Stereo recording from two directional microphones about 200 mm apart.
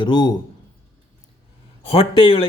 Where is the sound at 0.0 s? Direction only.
20° left (ahead or behind).